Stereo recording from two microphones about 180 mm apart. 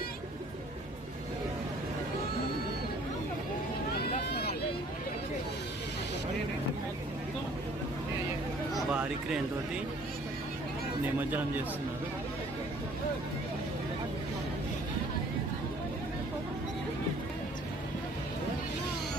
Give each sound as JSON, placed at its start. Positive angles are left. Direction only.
{"t": 4.3, "sound": "vehicle", "side_deg": 60}
{"t": 8.7, "sound": "a sound", "side_deg": -5}
{"t": 11.0, "sound": "speech", "side_deg": -10}